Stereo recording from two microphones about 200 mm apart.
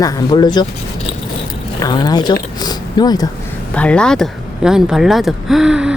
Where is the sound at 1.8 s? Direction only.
20° left (ahead or behind).